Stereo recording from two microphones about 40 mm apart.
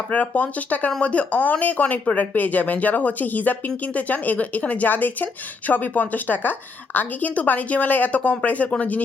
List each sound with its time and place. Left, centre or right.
0.1 s speech: left